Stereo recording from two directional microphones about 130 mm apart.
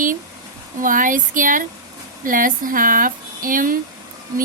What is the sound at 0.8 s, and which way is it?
A woman's voice, 90° right.